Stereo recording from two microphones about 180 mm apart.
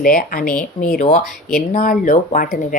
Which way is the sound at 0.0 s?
50° left (ahead or behind).